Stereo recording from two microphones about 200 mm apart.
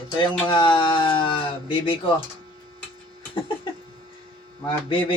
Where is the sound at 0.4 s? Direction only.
25° left (ahead or behind).